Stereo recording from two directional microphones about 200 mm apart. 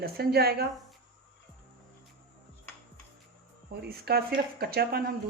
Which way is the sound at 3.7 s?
50° right (ahead or behind).